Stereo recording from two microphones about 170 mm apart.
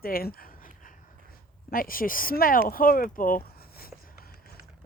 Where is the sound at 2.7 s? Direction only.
55° left (ahead or behind).